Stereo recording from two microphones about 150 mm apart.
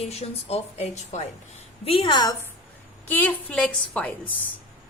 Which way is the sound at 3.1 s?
10° left (ahead or behind).